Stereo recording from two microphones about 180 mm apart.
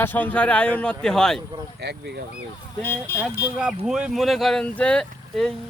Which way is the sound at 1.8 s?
70° right (ahead or behind).